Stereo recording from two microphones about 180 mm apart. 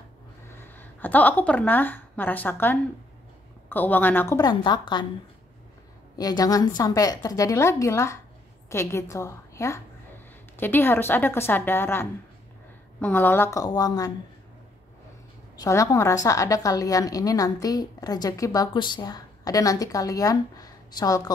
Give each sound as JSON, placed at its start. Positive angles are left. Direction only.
{"t": 0.5, "sound": "a woman's voice", "side_deg": 10}
{"t": 4.4, "sound": "a woman's voice", "side_deg": 25}
{"t": 6.1, "sound": "a woman's voice", "side_deg": 20}
{"t": 15.6, "sound": "a woman's voice", "side_deg": 20}